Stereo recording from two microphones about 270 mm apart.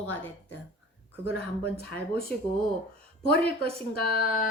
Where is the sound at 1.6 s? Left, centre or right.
Left.